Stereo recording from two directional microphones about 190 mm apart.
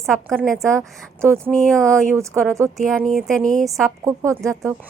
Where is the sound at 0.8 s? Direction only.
15° right (ahead or behind).